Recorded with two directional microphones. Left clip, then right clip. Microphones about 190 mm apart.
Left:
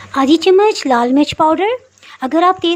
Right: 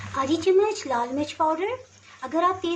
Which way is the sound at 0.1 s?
50° left (ahead or behind).